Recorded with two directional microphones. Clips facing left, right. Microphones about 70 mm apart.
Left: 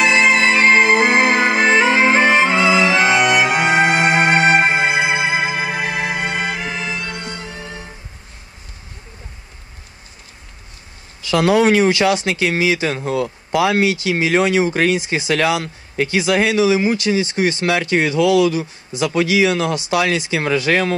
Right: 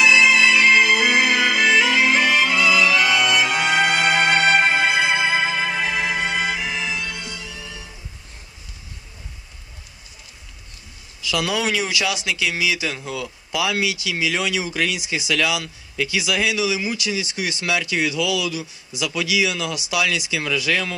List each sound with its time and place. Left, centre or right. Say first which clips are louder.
0.0 s music: left 2 dB; left; by 6.2 s centre
6.4 s music: left 1 dB; left
11.1 s speech: left 9 dB; left